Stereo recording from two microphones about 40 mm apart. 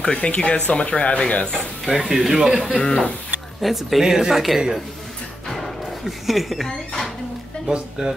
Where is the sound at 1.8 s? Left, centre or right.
Centre.